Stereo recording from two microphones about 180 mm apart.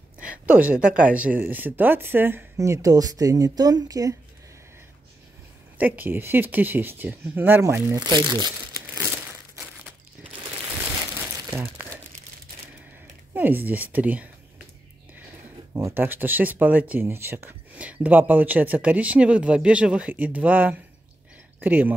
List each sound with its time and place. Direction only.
0.5 s speech: 10° right (ahead or behind)
5.8 s speech: 10° right (ahead or behind)
11.1 s crumpling: 10° right (ahead or behind)
13.3 s speech: 10° right (ahead or behind)
15.7 s speech: 15° right (ahead or behind)